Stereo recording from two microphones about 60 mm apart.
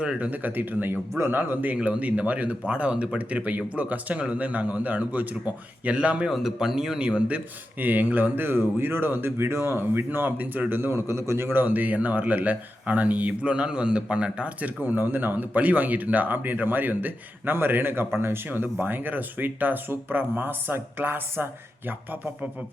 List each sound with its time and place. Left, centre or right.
0.0 s speech: right
1.7 s speech: right
6.2 s speech: centre; by 11.4 s right
11.5 s speech: right